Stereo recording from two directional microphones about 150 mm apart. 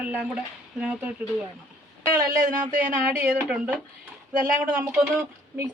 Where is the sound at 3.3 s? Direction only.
10° right (ahead or behind).